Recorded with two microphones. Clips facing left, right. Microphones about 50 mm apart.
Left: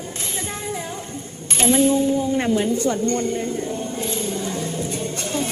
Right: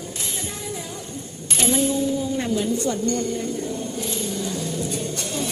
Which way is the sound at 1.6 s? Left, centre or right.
Left.